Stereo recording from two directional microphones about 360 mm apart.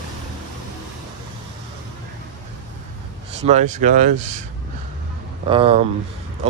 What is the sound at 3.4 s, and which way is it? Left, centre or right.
Speech, centre.